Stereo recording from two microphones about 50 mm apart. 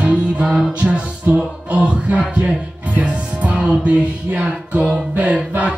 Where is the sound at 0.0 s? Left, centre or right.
Right.